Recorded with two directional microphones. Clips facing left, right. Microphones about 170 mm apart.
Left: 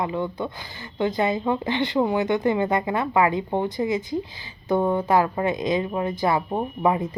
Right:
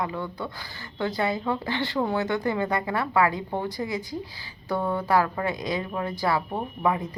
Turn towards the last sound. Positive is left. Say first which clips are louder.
# left 4 dB
turn(degrees=20)  # may be behind; listen again after turning